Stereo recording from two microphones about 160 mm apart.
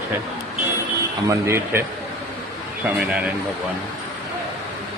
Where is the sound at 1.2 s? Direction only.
15° right (ahead or behind).